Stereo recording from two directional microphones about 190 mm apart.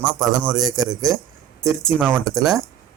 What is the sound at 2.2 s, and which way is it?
Speech, centre (ahead or behind).